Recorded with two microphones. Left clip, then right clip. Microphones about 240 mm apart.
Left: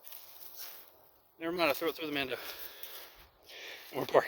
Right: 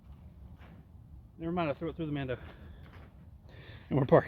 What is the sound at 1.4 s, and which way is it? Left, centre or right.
Speech, left.